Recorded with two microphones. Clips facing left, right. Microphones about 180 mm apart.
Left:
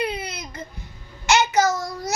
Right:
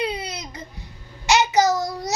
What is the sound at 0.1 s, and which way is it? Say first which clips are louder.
Baby cry: right 1 dB; 15° right (ahead or behind).